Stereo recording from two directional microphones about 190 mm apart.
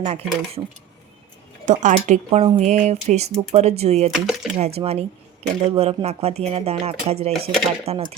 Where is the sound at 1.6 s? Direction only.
40° right (ahead or behind).